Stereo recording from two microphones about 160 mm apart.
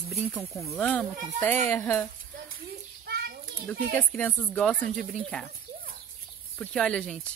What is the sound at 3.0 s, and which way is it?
Children playing, 80° right.